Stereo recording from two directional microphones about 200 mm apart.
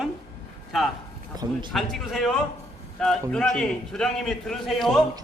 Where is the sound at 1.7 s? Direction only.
Centre (ahead or behind).